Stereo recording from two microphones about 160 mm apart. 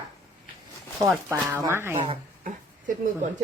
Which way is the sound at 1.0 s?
15° right (ahead or behind).